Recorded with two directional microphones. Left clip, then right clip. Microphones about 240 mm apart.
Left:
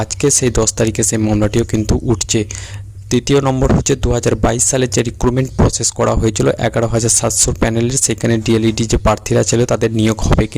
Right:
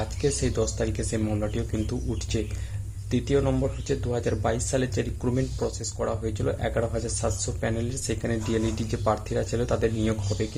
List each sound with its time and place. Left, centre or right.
0.0 s speech: left